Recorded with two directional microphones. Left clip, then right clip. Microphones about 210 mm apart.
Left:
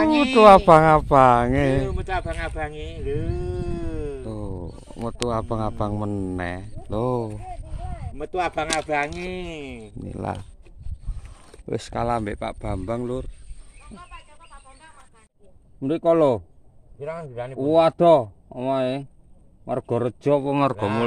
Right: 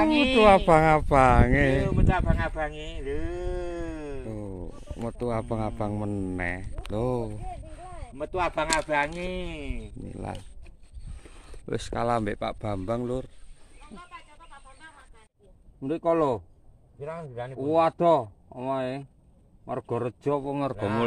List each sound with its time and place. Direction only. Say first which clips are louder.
0.0 s speech: left 6 dB; 5° left (ahead or behind)
8.2 s speech: left 2 dB; 5° right (ahead or behind)
9.9 s speech: left 9 dB; 20° left (ahead or behind)
11.6 s speech: left 3 dB; 5° left (ahead or behind)
15.8 s a man's voice: left 6 dB; 45° left (ahead or behind)